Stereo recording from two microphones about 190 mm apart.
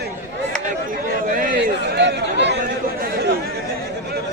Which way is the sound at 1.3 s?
45° right (ahead or behind).